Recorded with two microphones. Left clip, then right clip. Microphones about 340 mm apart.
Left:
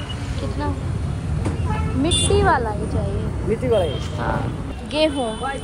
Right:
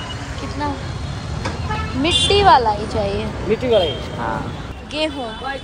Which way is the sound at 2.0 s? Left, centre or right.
Centre.